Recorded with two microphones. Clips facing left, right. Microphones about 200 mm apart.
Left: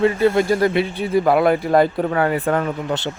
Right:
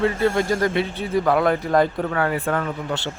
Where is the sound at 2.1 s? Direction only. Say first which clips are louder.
Left 4 dB; 25° left (ahead or behind).